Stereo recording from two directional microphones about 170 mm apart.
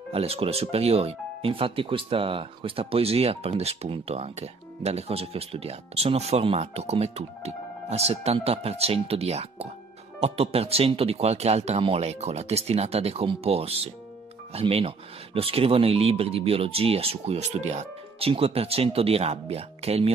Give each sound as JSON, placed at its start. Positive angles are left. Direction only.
{"t": 0.1, "sound": "speech", "side_deg": -35}